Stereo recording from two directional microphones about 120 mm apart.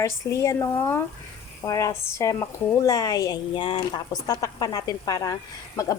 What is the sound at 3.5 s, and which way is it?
Speech, 45° left (ahead or behind).